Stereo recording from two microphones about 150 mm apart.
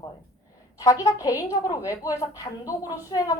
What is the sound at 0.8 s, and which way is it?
A woman's voice, 20° left (ahead or behind).